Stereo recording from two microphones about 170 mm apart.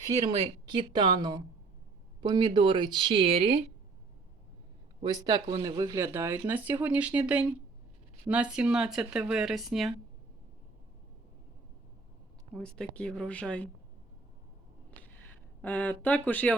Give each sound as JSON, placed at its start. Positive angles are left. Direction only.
{"t": 0.3, "sound": "speech", "side_deg": -30}
{"t": 5.0, "sound": "speech", "side_deg": -25}
{"t": 12.6, "sound": "speech", "side_deg": 5}
{"t": 15.6, "sound": "speech", "side_deg": 10}